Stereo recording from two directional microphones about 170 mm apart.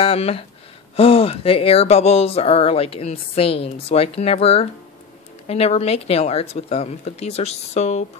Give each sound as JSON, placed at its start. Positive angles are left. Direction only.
{"t": 0.0, "sound": "speech", "side_deg": 35}